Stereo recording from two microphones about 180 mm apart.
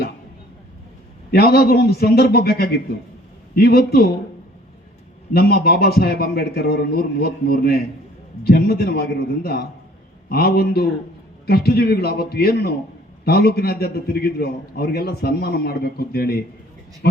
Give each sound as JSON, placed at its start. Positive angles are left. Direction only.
{"t": 1.3, "sound": "a man's voice", "side_deg": 60}
{"t": 5.3, "sound": "a man's voice", "side_deg": 60}